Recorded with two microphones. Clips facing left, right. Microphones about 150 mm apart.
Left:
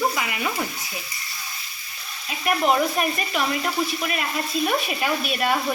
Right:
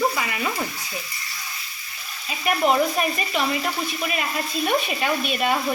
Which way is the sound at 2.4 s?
Centre (ahead or behind).